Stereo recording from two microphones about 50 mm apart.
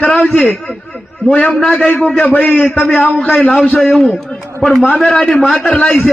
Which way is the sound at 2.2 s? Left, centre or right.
Left.